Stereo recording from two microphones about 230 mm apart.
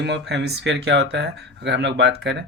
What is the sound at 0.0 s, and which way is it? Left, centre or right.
Speech, right.